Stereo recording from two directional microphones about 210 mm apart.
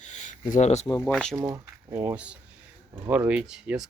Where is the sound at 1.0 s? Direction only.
5° left (ahead or behind).